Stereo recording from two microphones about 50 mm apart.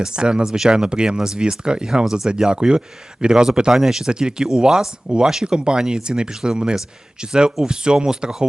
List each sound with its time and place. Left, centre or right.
0.0 s speech: centre